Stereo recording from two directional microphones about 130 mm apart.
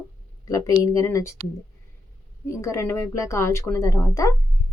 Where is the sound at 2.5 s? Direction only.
25° left (ahead or behind).